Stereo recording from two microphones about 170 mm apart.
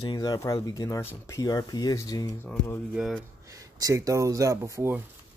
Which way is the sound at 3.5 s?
20° right (ahead or behind).